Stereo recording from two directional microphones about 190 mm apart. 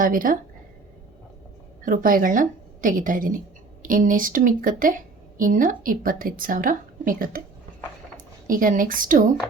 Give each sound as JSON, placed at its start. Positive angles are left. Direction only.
{"t": 0.0, "sound": "a woman's voice", "side_deg": -45}
{"t": 1.8, "sound": "a woman's voice", "side_deg": -45}
{"t": 8.4, "sound": "a woman's voice", "side_deg": -45}